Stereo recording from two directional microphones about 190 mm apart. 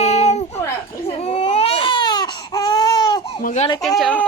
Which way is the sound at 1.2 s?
35° left (ahead or behind).